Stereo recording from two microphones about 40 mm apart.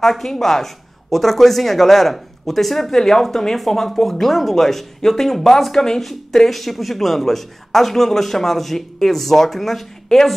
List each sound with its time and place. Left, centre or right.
0.0 s speech: centre